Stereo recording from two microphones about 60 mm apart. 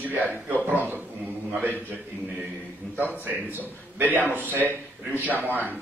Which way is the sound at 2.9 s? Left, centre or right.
Right.